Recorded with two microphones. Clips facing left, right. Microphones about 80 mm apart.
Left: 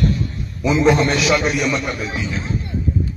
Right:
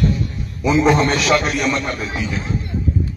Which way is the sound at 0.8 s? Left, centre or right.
Centre.